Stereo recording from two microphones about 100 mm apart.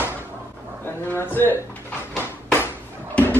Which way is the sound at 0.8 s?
20° left (ahead or behind).